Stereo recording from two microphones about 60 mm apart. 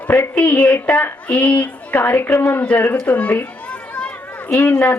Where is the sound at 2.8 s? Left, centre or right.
Left.